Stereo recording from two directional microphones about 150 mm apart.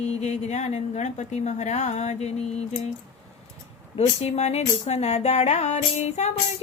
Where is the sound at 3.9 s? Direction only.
45° left (ahead or behind).